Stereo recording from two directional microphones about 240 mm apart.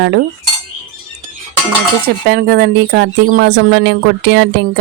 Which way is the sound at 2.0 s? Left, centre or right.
Right.